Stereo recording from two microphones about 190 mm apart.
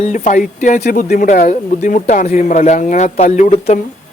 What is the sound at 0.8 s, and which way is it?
Speech, 55° left (ahead or behind).